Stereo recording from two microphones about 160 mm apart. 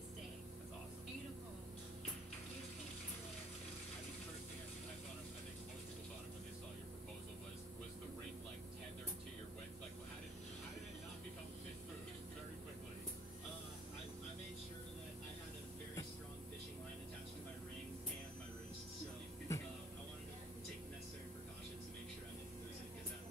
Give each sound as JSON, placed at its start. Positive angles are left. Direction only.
{"t": 19.5, "sound": "music", "side_deg": 20}